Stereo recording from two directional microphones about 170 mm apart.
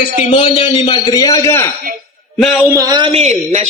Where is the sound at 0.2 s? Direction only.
40° left (ahead or behind); by 1.6 s 15° left (ahead or behind).